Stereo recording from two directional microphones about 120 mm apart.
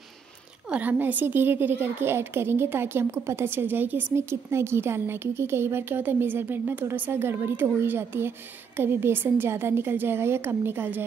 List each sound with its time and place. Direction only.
0.7 s a woman's voice: 10° right (ahead or behind)